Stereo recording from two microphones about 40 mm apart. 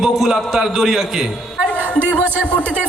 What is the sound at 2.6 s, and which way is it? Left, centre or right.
Speech, right.